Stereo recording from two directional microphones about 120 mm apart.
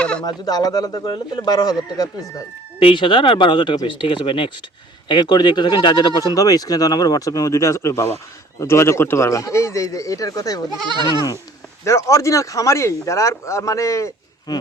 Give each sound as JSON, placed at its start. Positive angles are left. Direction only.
{"t": 0.0, "sound": "a sound", "side_deg": 10}
{"t": 0.3, "sound": "speech", "side_deg": 30}
{"t": 2.7, "sound": "speech", "side_deg": 45}
{"t": 11.9, "sound": "speech", "side_deg": 25}